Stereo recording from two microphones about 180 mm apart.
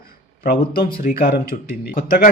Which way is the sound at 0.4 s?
55° left (ahead or behind).